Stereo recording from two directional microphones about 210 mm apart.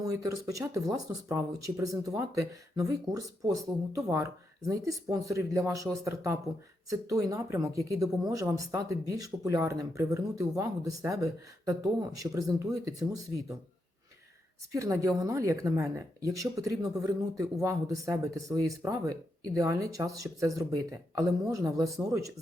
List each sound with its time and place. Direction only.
0.0 s speech: 15° right (ahead or behind)
14.8 s speech: 15° right (ahead or behind)